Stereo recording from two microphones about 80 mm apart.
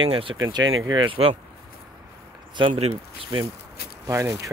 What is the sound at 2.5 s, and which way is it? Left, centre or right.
Speech, right.